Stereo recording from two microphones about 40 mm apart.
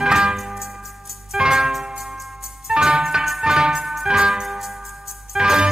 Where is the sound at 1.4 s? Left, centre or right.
Centre.